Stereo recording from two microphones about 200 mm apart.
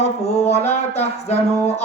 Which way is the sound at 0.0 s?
30° left (ahead or behind).